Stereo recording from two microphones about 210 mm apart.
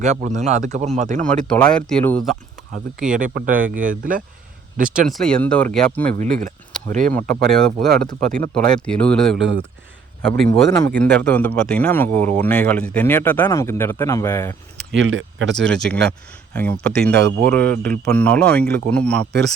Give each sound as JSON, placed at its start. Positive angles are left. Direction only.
{"t": 0.0, "sound": "speech", "side_deg": -35}
{"t": 1.3, "sound": "a man's voice", "side_deg": 5}
{"t": 3.0, "sound": "speech", "side_deg": -40}
{"t": 4.9, "sound": "a man's voice", "side_deg": 0}
{"t": 6.1, "sound": "speech", "side_deg": -40}
{"t": 7.1, "sound": "a man's voice", "side_deg": 5}
{"t": 9.4, "sound": "speech", "side_deg": -60}
{"t": 10.8, "sound": "speech", "side_deg": 10}
{"t": 14.8, "sound": "speech", "side_deg": -60}
{"t": 15.5, "sound": "a man's voice", "side_deg": 5}
{"t": 17.1, "sound": "speech", "side_deg": -55}
{"t": 17.5, "sound": "a man's voice", "side_deg": 5}